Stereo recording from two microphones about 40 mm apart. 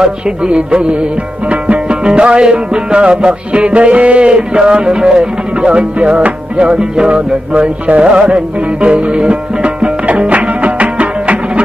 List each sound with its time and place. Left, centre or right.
0.0 s music: right